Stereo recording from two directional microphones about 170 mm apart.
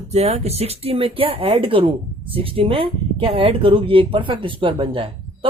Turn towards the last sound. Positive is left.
turn(degrees=-30)  # may be behind; listen again after turning